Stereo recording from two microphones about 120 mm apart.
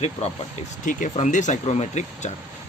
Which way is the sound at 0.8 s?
90° left.